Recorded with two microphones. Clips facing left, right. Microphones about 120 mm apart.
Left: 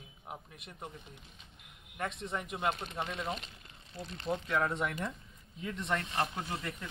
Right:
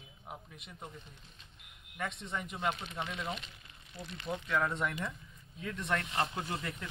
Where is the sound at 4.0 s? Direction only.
35° left (ahead or behind).